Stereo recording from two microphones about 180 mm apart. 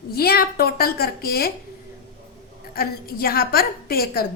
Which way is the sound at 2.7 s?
55° left (ahead or behind).